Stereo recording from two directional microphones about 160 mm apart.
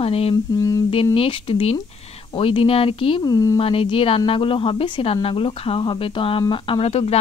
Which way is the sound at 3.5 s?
35° left (ahead or behind).